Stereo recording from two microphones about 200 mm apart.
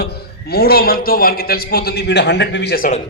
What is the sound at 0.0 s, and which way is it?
A man's voice, 55° left (ahead or behind).